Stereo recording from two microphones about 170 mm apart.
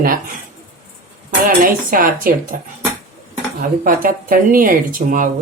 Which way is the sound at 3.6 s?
55° right (ahead or behind).